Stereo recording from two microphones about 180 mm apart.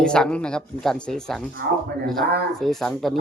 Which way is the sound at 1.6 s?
60° right (ahead or behind).